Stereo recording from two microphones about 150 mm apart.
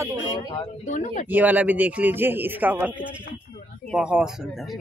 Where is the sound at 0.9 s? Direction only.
55° left (ahead or behind).